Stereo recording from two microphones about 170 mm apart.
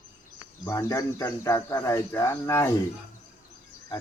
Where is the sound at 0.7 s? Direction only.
20° left (ahead or behind).